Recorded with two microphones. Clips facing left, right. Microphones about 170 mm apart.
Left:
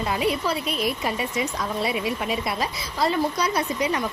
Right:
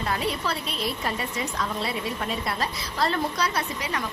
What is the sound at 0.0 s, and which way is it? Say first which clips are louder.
A woman's voice: left 4 dB; 15° left (ahead or behind).